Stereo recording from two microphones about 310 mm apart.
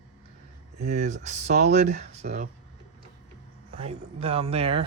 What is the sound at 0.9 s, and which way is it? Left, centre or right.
Speech, right.